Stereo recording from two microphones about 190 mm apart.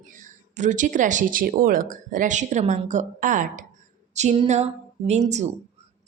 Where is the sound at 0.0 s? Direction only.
45° right (ahead or behind).